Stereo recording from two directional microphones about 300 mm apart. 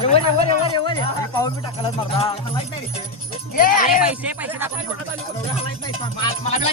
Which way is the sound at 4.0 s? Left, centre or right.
Centre.